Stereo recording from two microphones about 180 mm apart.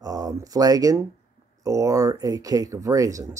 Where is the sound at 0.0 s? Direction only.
20° right (ahead or behind).